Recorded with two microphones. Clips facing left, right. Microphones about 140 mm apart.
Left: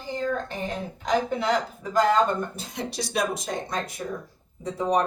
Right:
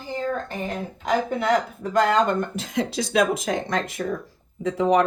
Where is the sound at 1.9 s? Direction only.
75° right (ahead or behind).